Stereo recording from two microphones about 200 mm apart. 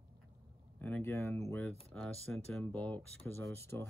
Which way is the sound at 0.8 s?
10° left (ahead or behind).